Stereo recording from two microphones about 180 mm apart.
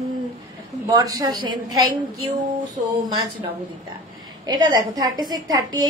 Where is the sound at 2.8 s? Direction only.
40° right (ahead or behind).